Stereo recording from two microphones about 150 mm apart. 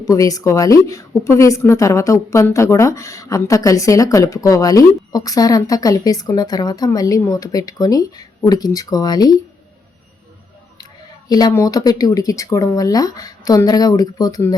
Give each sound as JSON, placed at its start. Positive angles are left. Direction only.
{"t": 0.0, "sound": "a woman's voice", "side_deg": 20}
{"t": 11.3, "sound": "a woman's voice", "side_deg": 25}